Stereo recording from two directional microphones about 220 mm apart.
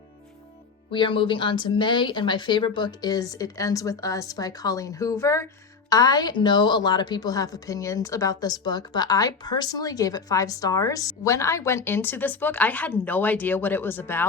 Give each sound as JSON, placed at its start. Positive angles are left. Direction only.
{"t": 0.9, "sound": "a woman's voice", "side_deg": 20}